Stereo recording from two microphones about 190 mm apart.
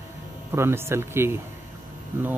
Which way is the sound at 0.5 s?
15° right (ahead or behind).